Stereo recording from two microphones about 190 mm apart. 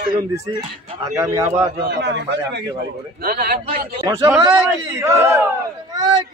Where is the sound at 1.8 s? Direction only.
60° right (ahead or behind).